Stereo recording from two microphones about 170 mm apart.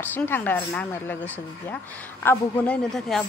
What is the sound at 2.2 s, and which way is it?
Speech, 5° left (ahead or behind).